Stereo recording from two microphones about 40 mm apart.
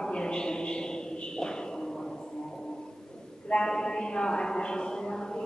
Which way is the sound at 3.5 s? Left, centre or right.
Left.